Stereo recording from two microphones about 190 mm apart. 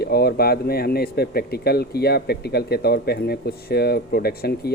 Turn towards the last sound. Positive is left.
turn(degrees=55)  # may be behind; listen again after turning